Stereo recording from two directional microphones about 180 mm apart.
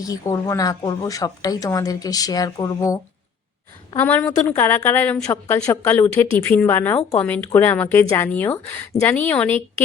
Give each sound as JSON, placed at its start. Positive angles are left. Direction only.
{"t": 0.0, "sound": "a woman's voice", "side_deg": 20}